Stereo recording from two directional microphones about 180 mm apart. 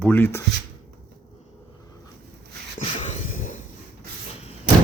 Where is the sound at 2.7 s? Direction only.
40° left (ahead or behind).